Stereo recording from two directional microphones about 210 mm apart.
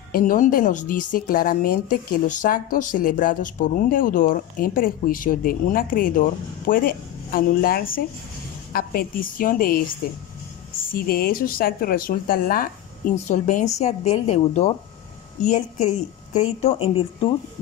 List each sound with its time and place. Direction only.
0.1 s speech: 40° left (ahead or behind)
10.9 s speech: 45° left (ahead or behind); by 17.3 s 25° left (ahead or behind)